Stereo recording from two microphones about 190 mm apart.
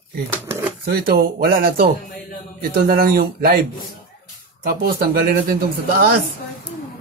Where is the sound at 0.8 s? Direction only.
50° right (ahead or behind).